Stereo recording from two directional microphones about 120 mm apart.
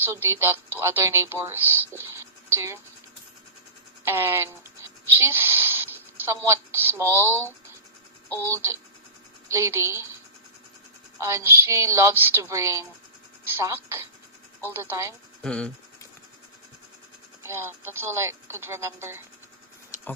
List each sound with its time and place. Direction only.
0.0 s speech: 20° right (ahead or behind)
4.0 s a sound: 20° right (ahead or behind)
8.4 s speech: 20° right (ahead or behind)
11.2 s speech: 25° right (ahead or behind)
15.4 s speech: 10° left (ahead or behind)
17.4 s speech: 20° right (ahead or behind)